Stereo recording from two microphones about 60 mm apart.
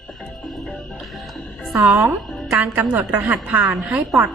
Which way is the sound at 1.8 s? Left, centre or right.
Right.